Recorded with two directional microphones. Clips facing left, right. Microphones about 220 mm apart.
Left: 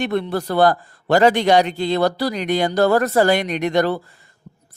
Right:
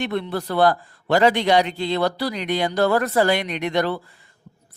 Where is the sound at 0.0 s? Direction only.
45° left (ahead or behind).